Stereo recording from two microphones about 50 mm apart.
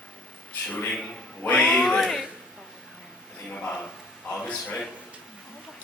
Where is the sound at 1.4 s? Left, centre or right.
Left.